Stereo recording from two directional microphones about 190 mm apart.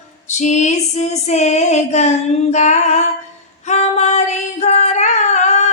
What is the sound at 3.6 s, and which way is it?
Singing, 35° left (ahead or behind).